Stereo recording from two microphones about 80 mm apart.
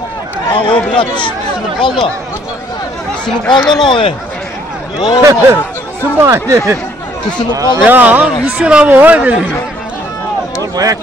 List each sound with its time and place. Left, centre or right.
0.5 s speech: left
0.9 s speech: left
1.8 s speech: left
3.3 s speech: centre
3.8 s a man's voice: left
5.2 s speech: right
7.8 s speech: centre
10.6 s speech: right